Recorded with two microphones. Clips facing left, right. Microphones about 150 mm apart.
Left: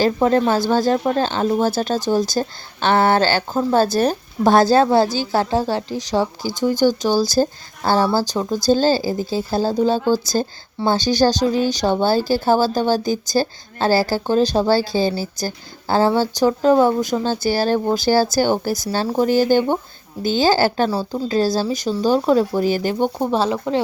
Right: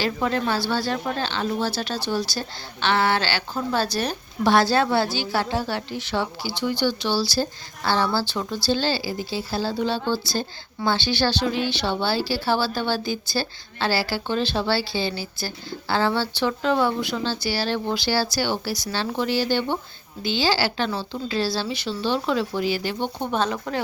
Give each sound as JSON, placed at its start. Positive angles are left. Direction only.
{"t": 0.0, "sound": "speech", "side_deg": 35}
{"t": 23.5, "sound": "a woman's voice", "side_deg": 20}